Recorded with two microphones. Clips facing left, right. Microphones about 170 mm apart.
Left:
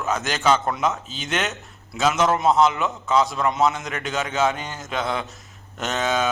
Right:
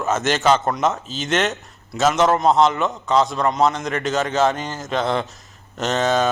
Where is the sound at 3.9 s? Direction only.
40° right (ahead or behind).